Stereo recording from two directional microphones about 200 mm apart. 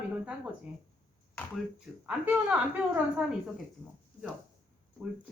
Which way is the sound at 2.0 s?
5° right (ahead or behind).